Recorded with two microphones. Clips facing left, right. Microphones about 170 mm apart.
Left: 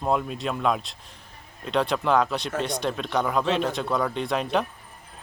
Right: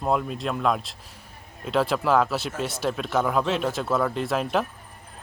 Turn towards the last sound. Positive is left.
turn(degrees=0)  # may be behind; listen again after turning